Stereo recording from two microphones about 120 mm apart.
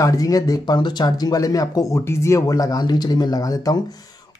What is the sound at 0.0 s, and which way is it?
Speech, 30° left (ahead or behind).